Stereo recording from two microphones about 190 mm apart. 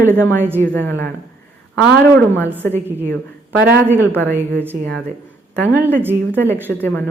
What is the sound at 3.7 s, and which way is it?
Speech, 10° right (ahead or behind).